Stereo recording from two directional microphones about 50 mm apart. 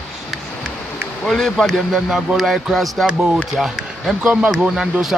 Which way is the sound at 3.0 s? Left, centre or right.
Centre.